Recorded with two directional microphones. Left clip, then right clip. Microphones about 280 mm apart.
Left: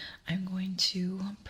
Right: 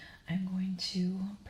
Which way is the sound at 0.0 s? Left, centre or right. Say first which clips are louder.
Left 3 dB; left.